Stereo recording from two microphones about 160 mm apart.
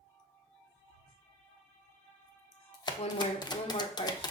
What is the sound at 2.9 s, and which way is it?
Speech, 25° left (ahead or behind).